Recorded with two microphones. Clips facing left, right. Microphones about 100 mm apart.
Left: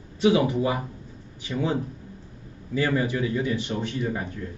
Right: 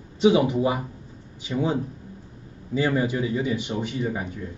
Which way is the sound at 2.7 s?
20° right (ahead or behind).